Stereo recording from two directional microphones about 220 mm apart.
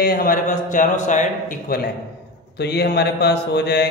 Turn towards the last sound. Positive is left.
turn(degrees=50)  # may be behind; listen again after turning